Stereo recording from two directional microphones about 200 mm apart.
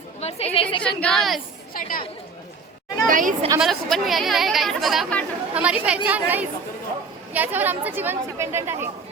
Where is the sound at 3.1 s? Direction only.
40° right (ahead or behind).